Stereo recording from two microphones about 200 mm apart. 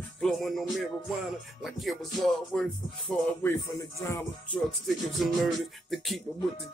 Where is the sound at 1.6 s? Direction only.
Centre (ahead or behind).